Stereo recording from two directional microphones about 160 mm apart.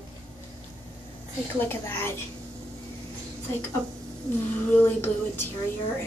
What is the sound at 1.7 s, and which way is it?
Speech, 15° left (ahead or behind).